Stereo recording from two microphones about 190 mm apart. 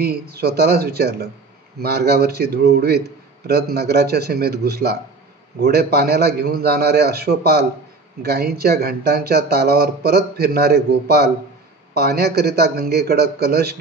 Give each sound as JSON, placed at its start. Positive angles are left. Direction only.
{"t": 0.0, "sound": "speech", "side_deg": -55}